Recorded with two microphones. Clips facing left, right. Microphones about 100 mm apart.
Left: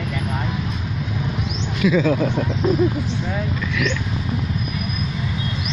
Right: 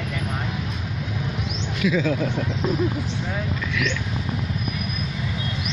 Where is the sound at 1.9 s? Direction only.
60° left (ahead or behind).